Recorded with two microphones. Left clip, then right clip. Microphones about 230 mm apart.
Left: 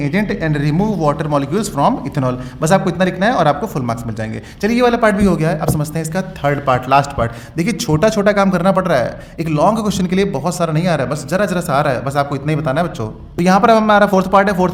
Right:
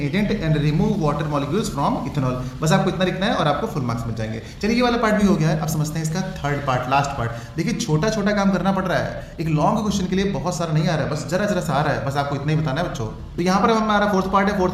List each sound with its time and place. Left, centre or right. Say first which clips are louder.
0.0 s a man's voice: left 5 dB; left